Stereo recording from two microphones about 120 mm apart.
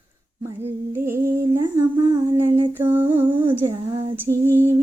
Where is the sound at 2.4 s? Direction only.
20° right (ahead or behind).